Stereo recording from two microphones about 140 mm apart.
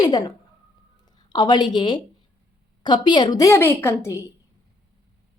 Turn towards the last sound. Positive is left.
turn(degrees=20)  # may be behind; listen again after turning